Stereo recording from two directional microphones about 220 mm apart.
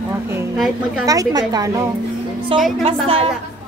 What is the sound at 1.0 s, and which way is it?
Speech, 15° right (ahead or behind).